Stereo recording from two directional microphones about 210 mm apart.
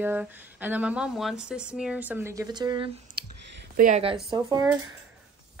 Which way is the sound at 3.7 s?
40° right (ahead or behind).